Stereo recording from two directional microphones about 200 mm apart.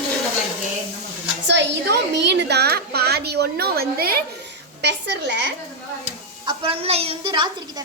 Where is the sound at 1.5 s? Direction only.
60° right (ahead or behind).